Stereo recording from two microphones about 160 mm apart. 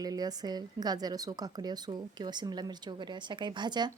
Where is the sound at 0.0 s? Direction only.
25° right (ahead or behind).